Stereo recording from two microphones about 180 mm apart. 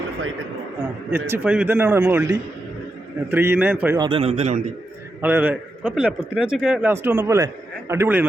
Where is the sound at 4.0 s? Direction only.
30° right (ahead or behind).